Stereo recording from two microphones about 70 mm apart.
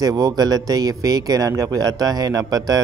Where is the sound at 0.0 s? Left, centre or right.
Right.